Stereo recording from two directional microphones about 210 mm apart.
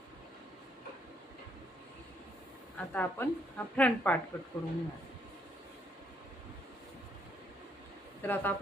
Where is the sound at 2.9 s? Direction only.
10° left (ahead or behind).